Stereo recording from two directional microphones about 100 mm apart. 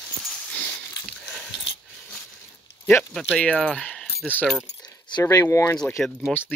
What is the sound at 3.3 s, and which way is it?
Speech, 10° left (ahead or behind).